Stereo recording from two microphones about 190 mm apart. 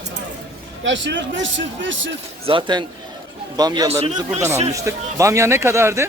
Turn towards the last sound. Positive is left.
turn(degrees=-15)  # may be behind; listen again after turning